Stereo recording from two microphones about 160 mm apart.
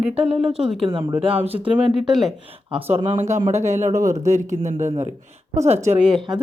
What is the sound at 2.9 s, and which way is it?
Speech, 35° right (ahead or behind).